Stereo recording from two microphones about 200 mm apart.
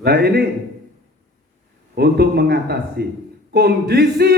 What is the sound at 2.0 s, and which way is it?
A man's voice, 55° right (ahead or behind).